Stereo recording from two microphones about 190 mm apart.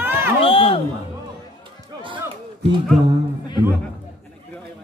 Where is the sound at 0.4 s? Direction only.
30° left (ahead or behind).